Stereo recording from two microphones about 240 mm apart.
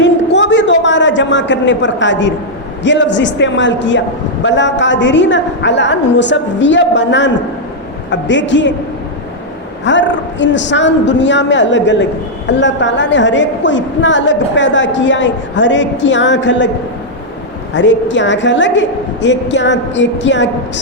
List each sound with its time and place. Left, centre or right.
0.0 s a sound: left
2.8 s a woman's voice: left
9.8 s a woman's voice: left
17.7 s a woman's voice: left